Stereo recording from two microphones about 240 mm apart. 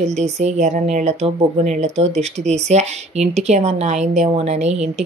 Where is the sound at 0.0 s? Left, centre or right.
Right.